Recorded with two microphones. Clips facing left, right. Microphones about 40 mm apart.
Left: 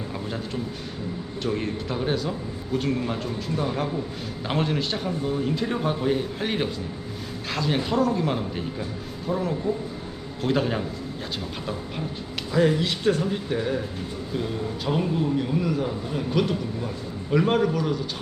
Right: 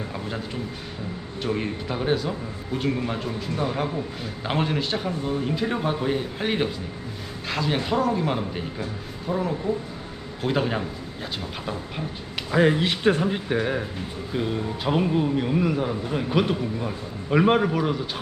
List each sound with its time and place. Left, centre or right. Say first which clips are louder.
0.3 s a man's voice: even; centre
12.5 s a man's voice: right 2 dB; right